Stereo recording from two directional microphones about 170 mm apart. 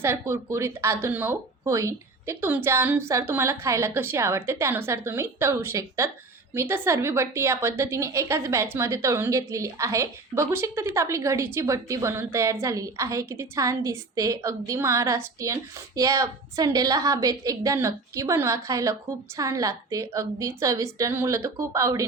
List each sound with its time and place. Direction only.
0.0 s a woman's voice: 15° right (ahead or behind)